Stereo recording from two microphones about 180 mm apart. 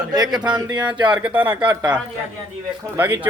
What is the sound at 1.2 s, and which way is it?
Speech, 10° right (ahead or behind).